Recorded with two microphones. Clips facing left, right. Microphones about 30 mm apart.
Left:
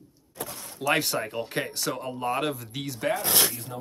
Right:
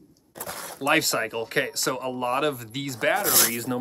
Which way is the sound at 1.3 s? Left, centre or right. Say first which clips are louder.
Right 4 dB; centre.